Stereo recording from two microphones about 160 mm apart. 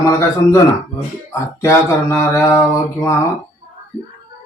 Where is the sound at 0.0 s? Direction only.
20° left (ahead or behind).